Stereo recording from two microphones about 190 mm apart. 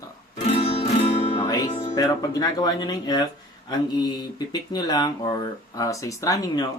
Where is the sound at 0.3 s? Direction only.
35° left (ahead or behind).